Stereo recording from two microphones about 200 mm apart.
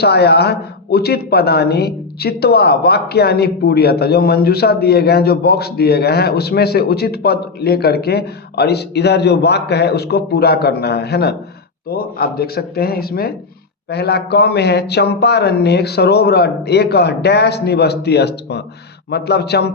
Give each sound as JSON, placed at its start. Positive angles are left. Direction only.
{"t": 0.0, "sound": "a man's voice", "side_deg": 55}